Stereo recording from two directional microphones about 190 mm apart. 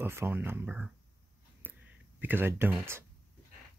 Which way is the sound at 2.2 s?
10° right (ahead or behind).